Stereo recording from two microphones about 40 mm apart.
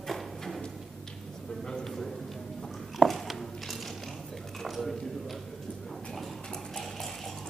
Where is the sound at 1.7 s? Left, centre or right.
Centre.